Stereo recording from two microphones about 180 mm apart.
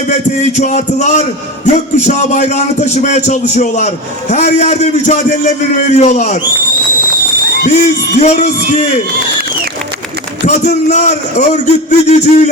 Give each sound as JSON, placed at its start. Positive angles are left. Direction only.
{"t": 0.5, "sound": "a man's voice", "side_deg": 45}
{"t": 6.0, "sound": "music", "side_deg": 45}
{"t": 7.6, "sound": "music", "side_deg": 45}
{"t": 10.4, "sound": "a man's voice", "side_deg": 40}